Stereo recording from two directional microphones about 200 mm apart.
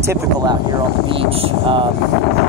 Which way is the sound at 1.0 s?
30° right (ahead or behind).